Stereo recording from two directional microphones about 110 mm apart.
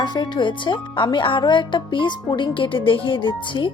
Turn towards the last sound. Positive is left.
turn(degrees=50)  # may be behind; listen again after turning